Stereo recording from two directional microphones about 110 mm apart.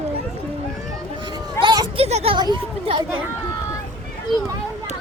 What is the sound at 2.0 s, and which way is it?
Speech, 70° right (ahead or behind).